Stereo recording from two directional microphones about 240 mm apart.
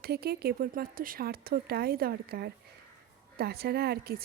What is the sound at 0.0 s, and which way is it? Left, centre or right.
A woman's voice, right.